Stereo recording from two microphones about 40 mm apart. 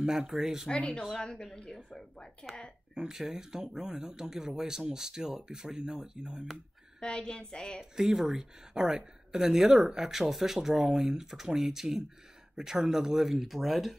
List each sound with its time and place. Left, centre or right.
0.0 s speech: centre
0.7 s a woman's voice: left
2.4 s a woman's voice: centre
2.9 s speech: centre
7.0 s a woman's voice: centre
7.8 s speech: centre